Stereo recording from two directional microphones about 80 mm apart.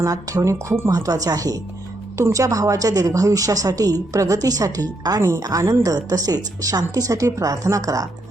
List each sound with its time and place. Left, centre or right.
0.0 s speech: right